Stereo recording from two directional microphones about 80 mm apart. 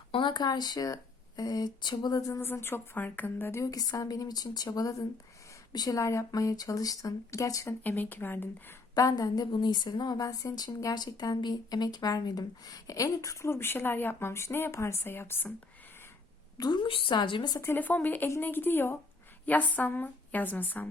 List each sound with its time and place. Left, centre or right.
0.2 s speech: left
2.4 s a woman's voice: left
3.6 s speech: left
6.0 s speech: left
7.9 s a woman's voice: left
9.0 s speech: left
9.5 s speech: left
10.5 s speech: left
16.6 s a woman's voice: left
17.6 s a woman's voice: left